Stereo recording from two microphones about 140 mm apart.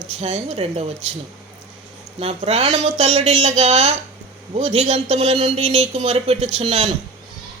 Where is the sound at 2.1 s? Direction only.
45° right (ahead or behind).